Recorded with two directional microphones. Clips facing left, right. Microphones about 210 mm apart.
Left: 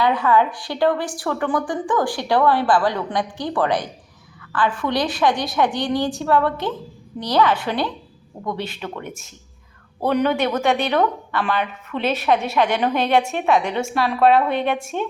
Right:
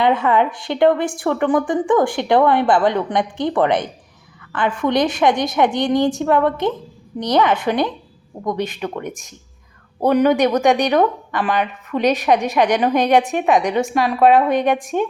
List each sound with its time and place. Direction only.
0.0 s a woman's voice: 20° right (ahead or behind)
10.2 s a woman's voice: 15° right (ahead or behind)